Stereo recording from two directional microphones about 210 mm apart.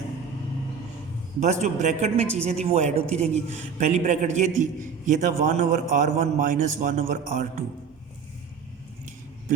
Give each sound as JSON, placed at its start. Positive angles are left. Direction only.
{"t": 1.4, "sound": "speech", "side_deg": -35}